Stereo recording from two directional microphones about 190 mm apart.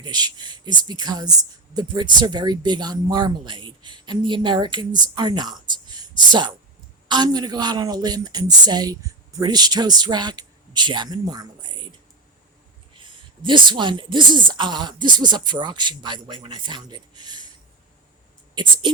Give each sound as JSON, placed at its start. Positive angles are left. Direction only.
{"t": 0.0, "sound": "speech", "side_deg": -20}
{"t": 13.0, "sound": "speech", "side_deg": -25}
{"t": 18.5, "sound": "speech", "side_deg": -25}